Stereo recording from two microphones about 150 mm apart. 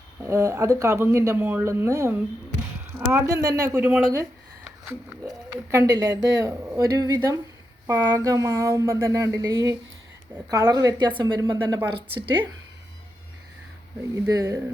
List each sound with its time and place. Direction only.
0.2 s speech: 20° right (ahead or behind)
11.5 s speech: 15° right (ahead or behind)
11.9 s speech: 35° right (ahead or behind)
14.2 s speech: 25° right (ahead or behind)